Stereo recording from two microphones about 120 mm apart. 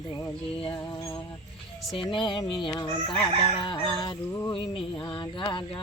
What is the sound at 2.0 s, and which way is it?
Cricket, 40° left (ahead or behind).